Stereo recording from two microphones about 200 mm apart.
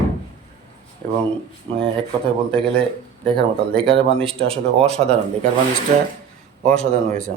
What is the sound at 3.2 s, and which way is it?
Speech, 25° right (ahead or behind).